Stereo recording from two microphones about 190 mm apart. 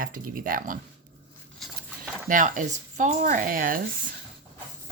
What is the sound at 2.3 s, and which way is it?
Speech, 45° right (ahead or behind).